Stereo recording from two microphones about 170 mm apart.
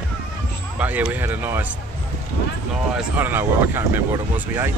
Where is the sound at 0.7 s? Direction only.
10° right (ahead or behind).